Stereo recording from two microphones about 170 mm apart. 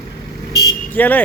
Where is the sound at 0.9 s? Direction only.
10° left (ahead or behind).